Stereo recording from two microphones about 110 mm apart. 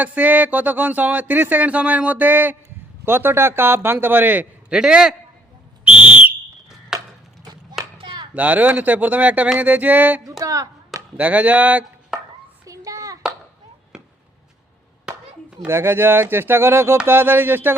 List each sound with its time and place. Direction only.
0.0 s a man's voice: 15° right (ahead or behind)
5.8 s whistle: 10° right (ahead or behind)
7.9 s chop: 45° right (ahead or behind)
8.3 s speech: 15° right (ahead or behind)
10.4 s chop: 30° right (ahead or behind)
11.2 s speech: 15° right (ahead or behind)
12.1 s chopping: 5° right (ahead or behind)
12.6 s a sound: 30° right (ahead or behind)
13.9 s basketball bounce: 5° right (ahead or behind)
15.1 s clapping: 10° right (ahead or behind)
15.6 s a man's voice: 20° right (ahead or behind)